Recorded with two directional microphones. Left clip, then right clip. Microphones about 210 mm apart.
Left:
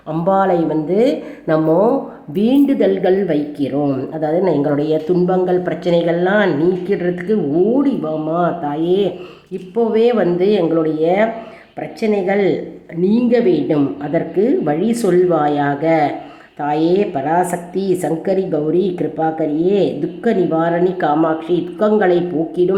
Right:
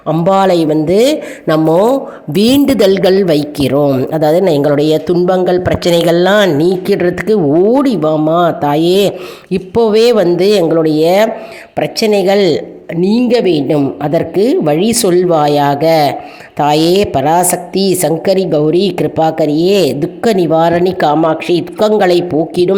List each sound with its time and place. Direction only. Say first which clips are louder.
0.1 s a woman's voice: right 5 dB; 35° right (ahead or behind)